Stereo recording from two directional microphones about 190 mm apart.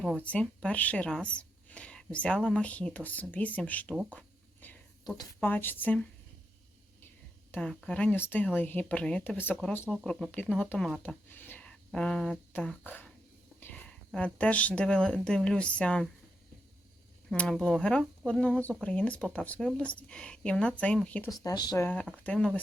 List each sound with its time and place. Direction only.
0.0 s speech: 5° left (ahead or behind)
5.0 s speech: 20° left (ahead or behind)
5.4 s speech: 10° left (ahead or behind)
7.5 s speech: 5° left (ahead or behind)
9.9 s speech: centre (ahead or behind)
17.2 s speech: 5° left (ahead or behind)
21.3 s speech: 20° left (ahead or behind)
21.8 s speech: 5° left (ahead or behind)